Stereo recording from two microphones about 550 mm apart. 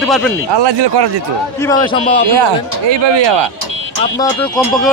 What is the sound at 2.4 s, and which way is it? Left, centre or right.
Speech, right.